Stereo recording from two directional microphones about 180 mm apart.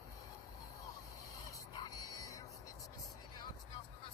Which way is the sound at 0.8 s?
20° left (ahead or behind).